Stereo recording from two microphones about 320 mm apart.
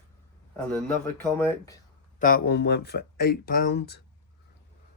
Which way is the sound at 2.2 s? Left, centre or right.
Left.